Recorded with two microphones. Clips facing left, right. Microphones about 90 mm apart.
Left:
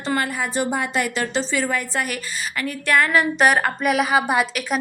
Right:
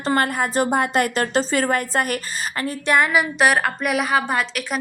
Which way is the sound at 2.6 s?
25° right (ahead or behind).